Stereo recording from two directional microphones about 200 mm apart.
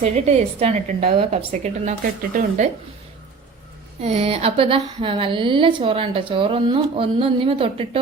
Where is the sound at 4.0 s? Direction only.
30° right (ahead or behind).